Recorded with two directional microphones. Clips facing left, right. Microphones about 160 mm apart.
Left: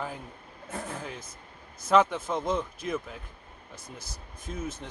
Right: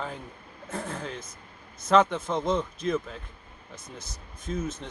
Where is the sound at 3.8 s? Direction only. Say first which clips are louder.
Right 1 dB; 30° left (ahead or behind).